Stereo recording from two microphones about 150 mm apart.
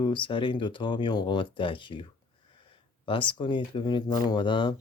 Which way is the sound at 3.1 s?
35° left (ahead or behind).